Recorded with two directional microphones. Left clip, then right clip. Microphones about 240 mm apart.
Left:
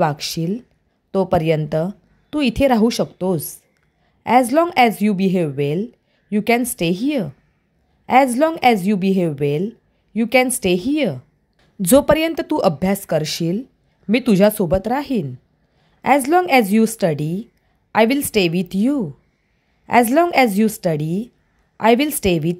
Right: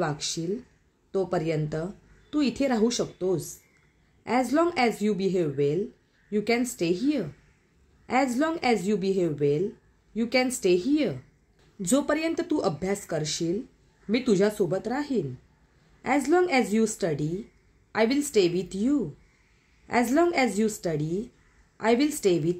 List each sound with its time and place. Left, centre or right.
0.0 s speech: left